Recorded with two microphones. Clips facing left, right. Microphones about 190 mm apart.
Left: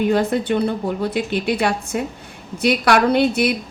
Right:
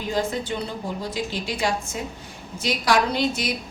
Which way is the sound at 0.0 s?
60° left (ahead or behind).